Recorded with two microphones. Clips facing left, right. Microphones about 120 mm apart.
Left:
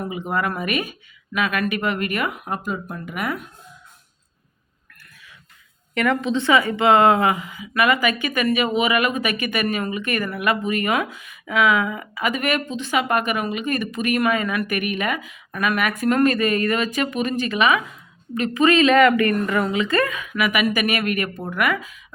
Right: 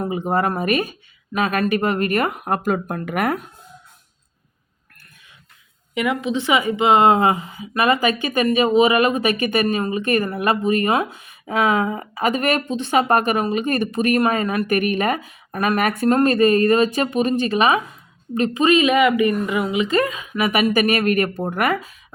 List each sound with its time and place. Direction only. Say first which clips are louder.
0.0 s speech: right 4 dB; 35° right (ahead or behind); by 3.4 s 50° right (ahead or behind)
5.9 s a woman's voice: left 1 dB; 10° right (ahead or behind); by 17.8 s 35° right (ahead or behind)
18.5 s speech: left 1 dB; 20° right (ahead or behind); by 21.8 s 40° right (ahead or behind)